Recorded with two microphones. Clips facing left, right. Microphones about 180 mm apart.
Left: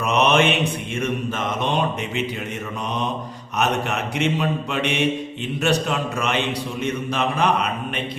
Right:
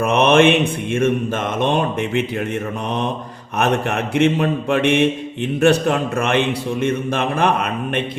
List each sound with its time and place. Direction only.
0.0 s mantra: 50° right (ahead or behind)
3.6 s mantra: 55° right (ahead or behind)